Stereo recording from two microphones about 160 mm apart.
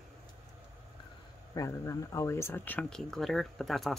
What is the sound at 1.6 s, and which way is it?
Speech, 20° left (ahead or behind).